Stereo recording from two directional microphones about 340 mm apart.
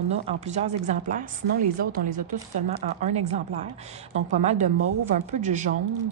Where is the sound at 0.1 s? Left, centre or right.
Centre.